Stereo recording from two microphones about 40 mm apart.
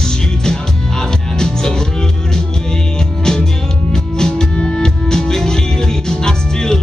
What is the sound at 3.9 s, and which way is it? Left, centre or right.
Music, centre.